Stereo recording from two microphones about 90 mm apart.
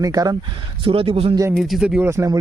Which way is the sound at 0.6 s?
80° right.